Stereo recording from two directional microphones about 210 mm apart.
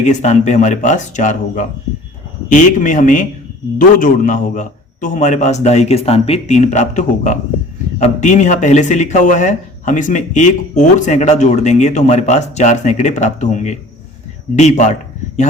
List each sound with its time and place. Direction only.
0.0 s speech: 35° left (ahead or behind)